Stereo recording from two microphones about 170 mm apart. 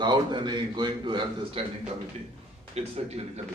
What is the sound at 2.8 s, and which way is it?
Speech, 40° right (ahead or behind).